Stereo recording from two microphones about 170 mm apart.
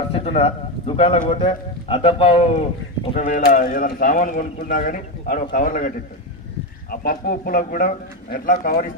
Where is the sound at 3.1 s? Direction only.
45° left (ahead or behind).